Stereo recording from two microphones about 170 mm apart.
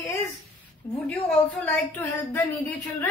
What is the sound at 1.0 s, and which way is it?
A woman's voice, 10° left (ahead or behind).